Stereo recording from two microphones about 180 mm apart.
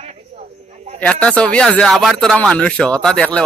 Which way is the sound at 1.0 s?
5° left (ahead or behind).